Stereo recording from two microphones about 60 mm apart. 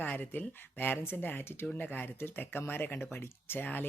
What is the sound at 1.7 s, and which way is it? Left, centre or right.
Speech, left.